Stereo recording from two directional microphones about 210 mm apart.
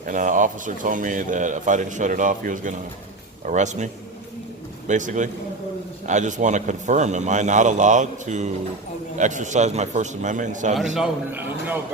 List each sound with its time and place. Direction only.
0.0 s speech: 40° right (ahead or behind)
4.9 s speech: 35° right (ahead or behind)
10.9 s a man's voice: 5° right (ahead or behind)